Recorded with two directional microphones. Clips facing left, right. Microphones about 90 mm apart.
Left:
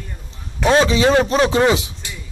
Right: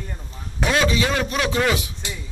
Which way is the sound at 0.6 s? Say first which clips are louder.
Left 6 dB; 30° left (ahead or behind).